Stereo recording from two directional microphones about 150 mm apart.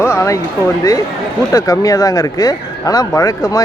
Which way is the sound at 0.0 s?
20° left (ahead or behind).